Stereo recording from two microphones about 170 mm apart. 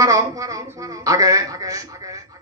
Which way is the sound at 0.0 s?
20° right (ahead or behind).